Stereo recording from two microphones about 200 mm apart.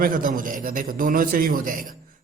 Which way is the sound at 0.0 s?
45° right (ahead or behind).